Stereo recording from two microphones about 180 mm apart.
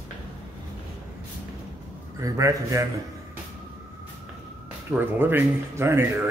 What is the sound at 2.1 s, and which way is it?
Speech, 15° right (ahead or behind).